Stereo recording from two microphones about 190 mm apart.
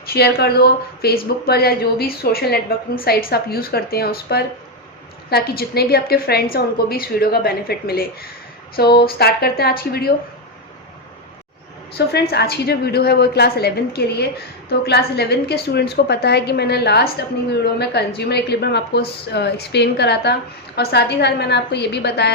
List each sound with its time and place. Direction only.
0.0 s a woman's voice: 55° left (ahead or behind)
11.9 s a woman's voice: 60° left (ahead or behind)